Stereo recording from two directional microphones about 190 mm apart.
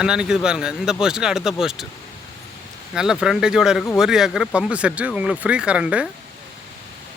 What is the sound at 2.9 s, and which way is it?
Speech, 5° right (ahead or behind).